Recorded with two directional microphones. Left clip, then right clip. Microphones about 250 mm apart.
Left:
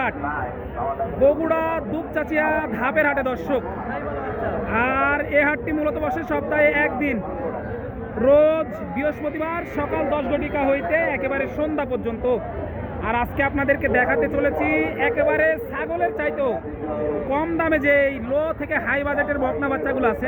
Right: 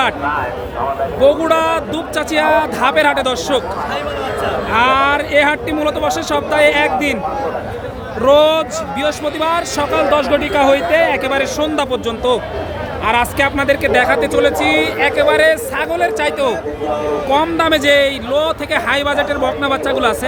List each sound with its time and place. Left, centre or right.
1.2 s speech: centre
4.7 s speech: centre
8.2 s a man's voice: centre